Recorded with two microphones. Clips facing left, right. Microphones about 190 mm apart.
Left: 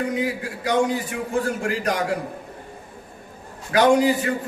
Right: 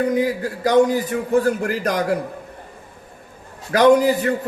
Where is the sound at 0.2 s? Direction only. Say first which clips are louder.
Right 5 dB; 40° right (ahead or behind).